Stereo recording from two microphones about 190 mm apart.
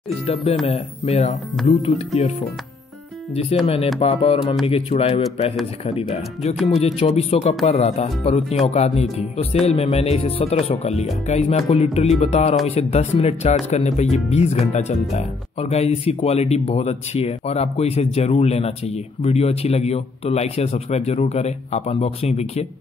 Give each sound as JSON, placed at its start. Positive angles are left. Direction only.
{"t": 0.7, "sound": "speech", "side_deg": 35}
{"t": 3.6, "sound": "speech", "side_deg": 30}